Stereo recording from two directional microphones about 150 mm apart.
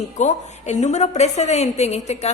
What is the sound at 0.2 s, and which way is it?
A woman's voice, 50° left (ahead or behind).